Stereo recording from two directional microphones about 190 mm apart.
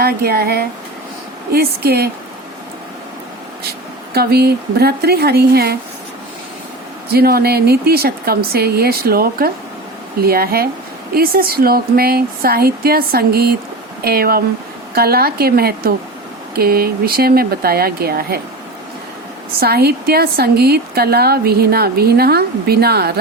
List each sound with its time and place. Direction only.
0.0 s a woman's voice: 55° right (ahead or behind)
4.1 s a woman's voice: 55° right (ahead or behind)
7.1 s a woman's voice: 55° right (ahead or behind)
19.5 s a woman's voice: 55° right (ahead or behind)